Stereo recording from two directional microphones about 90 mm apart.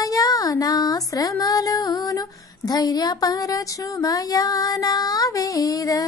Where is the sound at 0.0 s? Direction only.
45° left (ahead or behind).